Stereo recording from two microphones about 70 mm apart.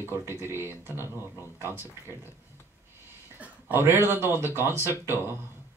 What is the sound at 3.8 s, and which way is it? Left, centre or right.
Speech, right.